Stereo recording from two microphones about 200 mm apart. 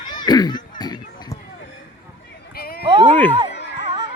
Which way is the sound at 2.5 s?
50° left (ahead or behind).